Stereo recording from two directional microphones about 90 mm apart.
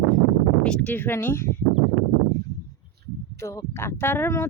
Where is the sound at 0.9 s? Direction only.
25° left (ahead or behind).